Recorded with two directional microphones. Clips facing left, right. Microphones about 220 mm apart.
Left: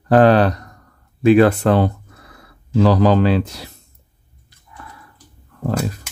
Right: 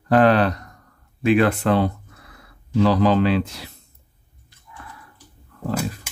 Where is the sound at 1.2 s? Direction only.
40° left (ahead or behind).